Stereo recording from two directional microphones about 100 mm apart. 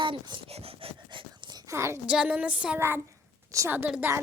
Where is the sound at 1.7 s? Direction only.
25° right (ahead or behind).